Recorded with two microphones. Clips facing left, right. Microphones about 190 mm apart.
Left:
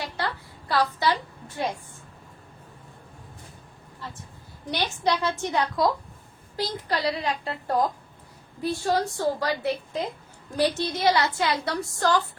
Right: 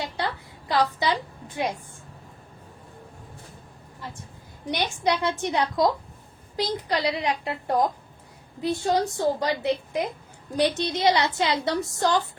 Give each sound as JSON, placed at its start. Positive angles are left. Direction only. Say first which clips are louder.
{"t": 0.7, "sound": "a woman's voice", "louder": "even", "side_deg": -20}
{"t": 4.7, "sound": "a woman's voice", "louder": "right 1 dB", "side_deg": -20}